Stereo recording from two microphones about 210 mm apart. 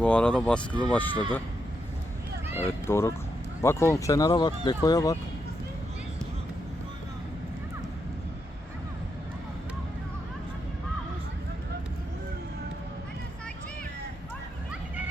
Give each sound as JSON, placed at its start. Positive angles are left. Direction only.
{"t": 0.0, "sound": "speech", "side_deg": 5}
{"t": 2.6, "sound": "speech", "side_deg": 10}